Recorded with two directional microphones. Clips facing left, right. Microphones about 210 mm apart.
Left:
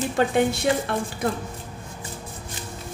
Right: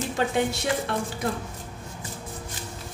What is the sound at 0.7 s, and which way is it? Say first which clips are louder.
Speech: left 4 dB; 30° left (ahead or behind).